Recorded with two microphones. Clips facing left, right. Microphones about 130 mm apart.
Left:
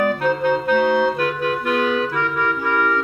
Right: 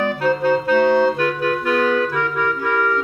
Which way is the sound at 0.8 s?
Centre (ahead or behind).